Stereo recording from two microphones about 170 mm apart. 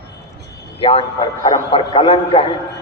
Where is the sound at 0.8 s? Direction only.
30° left (ahead or behind).